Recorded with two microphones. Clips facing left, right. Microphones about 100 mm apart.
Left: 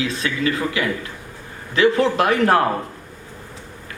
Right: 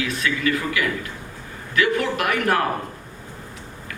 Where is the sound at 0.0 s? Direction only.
30° left (ahead or behind).